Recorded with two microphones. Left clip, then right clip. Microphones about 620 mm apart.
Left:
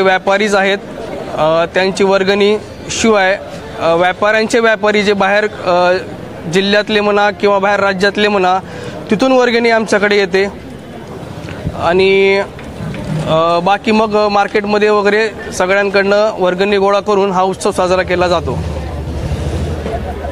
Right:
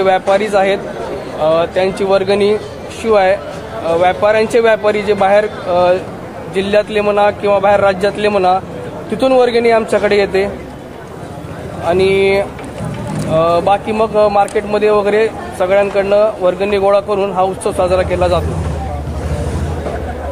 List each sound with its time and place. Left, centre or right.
0.0 s a man's voice: left
11.8 s speech: left